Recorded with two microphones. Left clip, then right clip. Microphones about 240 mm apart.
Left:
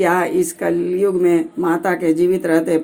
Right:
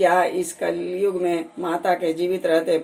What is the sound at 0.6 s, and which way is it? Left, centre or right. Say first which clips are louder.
Speech: left 6 dB; centre.